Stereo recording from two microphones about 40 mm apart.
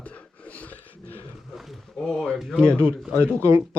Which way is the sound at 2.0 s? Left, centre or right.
Centre.